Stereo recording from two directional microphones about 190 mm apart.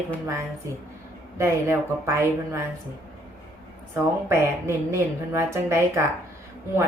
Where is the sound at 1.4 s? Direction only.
15° right (ahead or behind).